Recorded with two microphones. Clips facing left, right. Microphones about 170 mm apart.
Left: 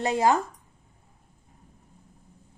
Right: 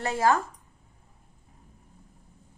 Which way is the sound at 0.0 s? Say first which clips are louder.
Left 2 dB; 20° left (ahead or behind).